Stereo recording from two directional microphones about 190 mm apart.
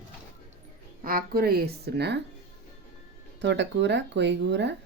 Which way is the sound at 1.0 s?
50° right (ahead or behind).